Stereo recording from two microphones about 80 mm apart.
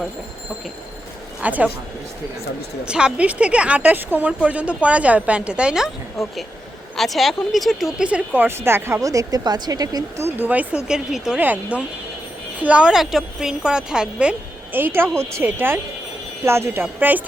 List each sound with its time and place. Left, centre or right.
1.4 s speech: centre
2.8 s speech: centre; by 9.0 s right
9.0 s speech: right
10.3 s speech: right
11.3 s a woman's voice: centre
12.9 s speech: centre
14.7 s speech: right